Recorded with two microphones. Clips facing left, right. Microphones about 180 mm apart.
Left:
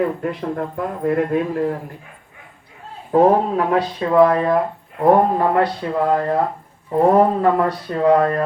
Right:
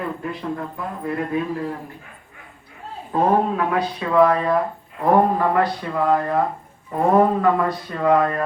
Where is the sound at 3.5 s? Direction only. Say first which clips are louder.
Left 3 dB; 35° left (ahead or behind).